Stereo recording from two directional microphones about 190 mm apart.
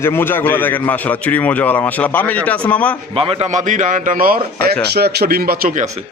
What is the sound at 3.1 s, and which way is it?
A man's voice, 30° right (ahead or behind).